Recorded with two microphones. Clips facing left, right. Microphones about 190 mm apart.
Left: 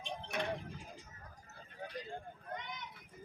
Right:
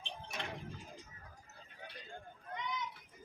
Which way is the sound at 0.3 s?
60° left (ahead or behind).